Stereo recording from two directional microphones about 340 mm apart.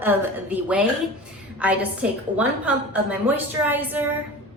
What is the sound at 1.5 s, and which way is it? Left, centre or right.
A woman's voice, centre.